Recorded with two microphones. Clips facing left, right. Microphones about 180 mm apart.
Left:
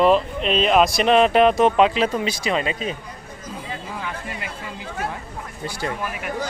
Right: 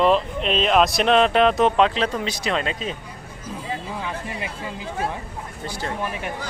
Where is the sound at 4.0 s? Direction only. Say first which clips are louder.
Right 1 dB; 20° right (ahead or behind).